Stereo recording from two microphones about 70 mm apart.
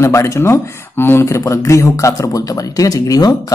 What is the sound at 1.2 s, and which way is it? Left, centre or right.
Speech, left.